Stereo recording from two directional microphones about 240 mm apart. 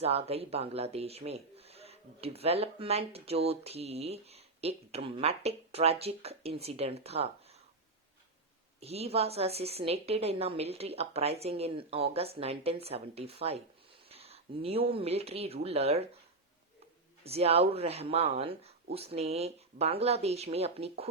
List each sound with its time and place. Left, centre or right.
0.0 s a man's voice: right
8.8 s a man's voice: right
17.2 s a man's voice: right